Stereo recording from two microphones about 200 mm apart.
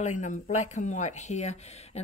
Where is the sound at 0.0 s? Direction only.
35° left (ahead or behind).